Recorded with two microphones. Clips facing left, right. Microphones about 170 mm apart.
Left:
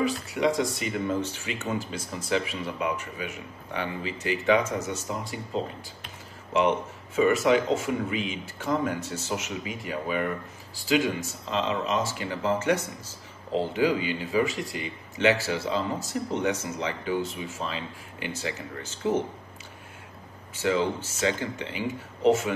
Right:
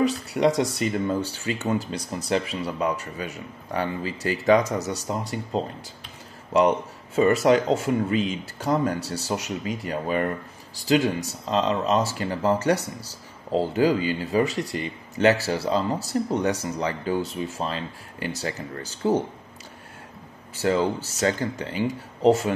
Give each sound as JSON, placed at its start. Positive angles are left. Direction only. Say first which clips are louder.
{"t": 0.0, "sound": "speech", "louder": "right 4 dB", "side_deg": -35}
{"t": 7.2, "sound": "speech", "louder": "right 3 dB", "side_deg": -40}
{"t": 20.5, "sound": "speech", "louder": "right 3 dB", "side_deg": -40}